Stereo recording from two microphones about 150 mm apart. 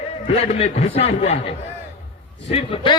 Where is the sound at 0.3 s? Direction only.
45° left (ahead or behind).